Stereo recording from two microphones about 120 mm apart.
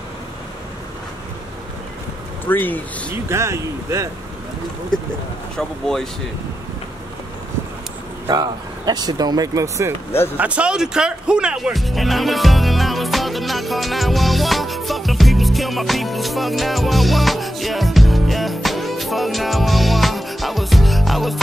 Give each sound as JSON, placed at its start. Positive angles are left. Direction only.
{"t": 2.4, "sound": "speech", "side_deg": 15}
{"t": 3.3, "sound": "speech", "side_deg": -20}
{"t": 4.9, "sound": "speech", "side_deg": 5}
{"t": 8.3, "sound": "speech", "side_deg": -35}
{"t": 10.3, "sound": "music", "side_deg": -10}